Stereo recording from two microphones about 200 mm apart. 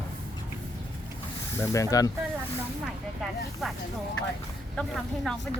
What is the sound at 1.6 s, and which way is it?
Speech, 15° left (ahead or behind).